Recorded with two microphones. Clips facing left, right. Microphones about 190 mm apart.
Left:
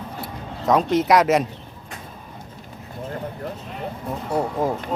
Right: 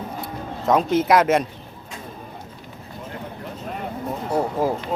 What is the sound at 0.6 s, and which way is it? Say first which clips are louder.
Speech: even; centre (ahead or behind).